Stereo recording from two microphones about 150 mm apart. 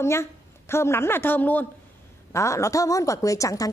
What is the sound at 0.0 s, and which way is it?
A woman's voice, 15° left (ahead or behind).